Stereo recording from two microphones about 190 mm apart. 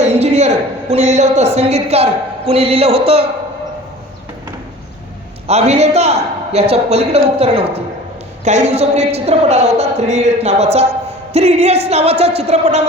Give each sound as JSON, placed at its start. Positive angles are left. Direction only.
{"t": 0.0, "sound": "a sound", "side_deg": -35}
{"t": 1.5, "sound": "speech", "side_deg": -35}
{"t": 5.5, "sound": "speech", "side_deg": -35}